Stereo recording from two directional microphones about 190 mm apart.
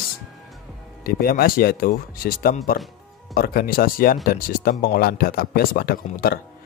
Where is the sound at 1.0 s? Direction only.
50° left (ahead or behind).